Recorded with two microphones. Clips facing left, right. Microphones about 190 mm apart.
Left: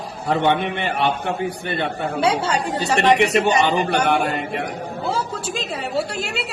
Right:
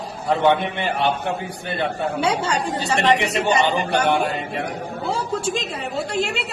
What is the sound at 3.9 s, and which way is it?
Speech, 60° left (ahead or behind).